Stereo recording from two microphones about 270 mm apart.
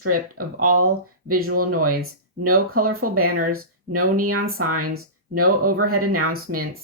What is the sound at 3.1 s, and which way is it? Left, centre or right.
Speech, right.